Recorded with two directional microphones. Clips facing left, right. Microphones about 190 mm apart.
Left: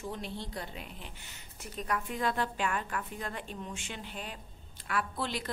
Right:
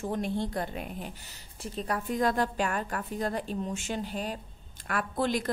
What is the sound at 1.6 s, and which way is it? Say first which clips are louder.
A woman's voice: right 3 dB; 30° right (ahead or behind).